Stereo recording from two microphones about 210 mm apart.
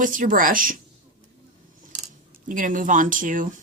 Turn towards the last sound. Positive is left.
turn(degrees=-40)  # may be behind; listen again after turning